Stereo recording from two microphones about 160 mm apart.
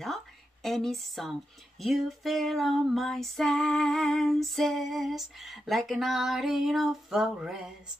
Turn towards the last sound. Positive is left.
turn(degrees=-5)  # may be behind; listen again after turning